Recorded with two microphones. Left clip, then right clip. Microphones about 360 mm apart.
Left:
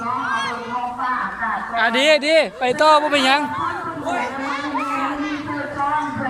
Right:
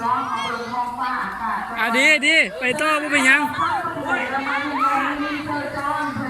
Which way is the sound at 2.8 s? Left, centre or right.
Centre.